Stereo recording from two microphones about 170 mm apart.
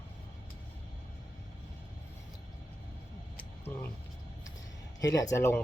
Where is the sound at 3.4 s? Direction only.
15° left (ahead or behind).